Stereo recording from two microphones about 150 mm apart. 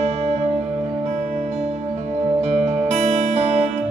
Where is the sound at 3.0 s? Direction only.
50° right (ahead or behind).